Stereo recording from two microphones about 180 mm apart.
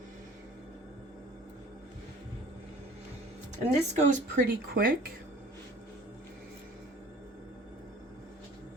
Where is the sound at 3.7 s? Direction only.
40° right (ahead or behind).